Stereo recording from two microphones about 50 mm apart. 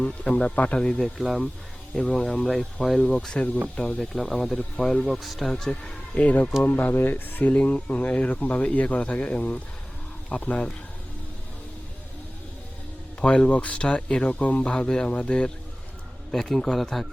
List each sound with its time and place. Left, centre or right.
0.0 s speech: left
0.8 s speech: centre
1.0 s speech: centre
4.0 s speech: centre
6.1 s speech: left
7.5 s speech: left
13.2 s speech: left
16.3 s speech: centre